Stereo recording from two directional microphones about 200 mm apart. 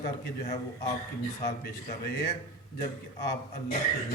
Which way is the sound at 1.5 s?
55° left (ahead or behind).